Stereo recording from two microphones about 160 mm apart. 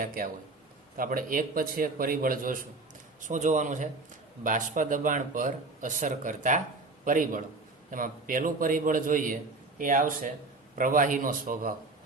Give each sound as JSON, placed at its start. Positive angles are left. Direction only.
{"t": 0.0, "sound": "a man's voice", "side_deg": -60}